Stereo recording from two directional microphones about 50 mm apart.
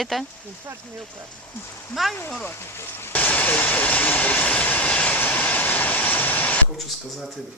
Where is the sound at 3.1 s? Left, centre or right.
Left.